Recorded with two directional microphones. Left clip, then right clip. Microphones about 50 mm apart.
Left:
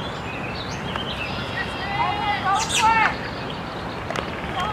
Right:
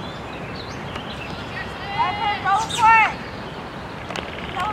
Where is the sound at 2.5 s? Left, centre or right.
Right.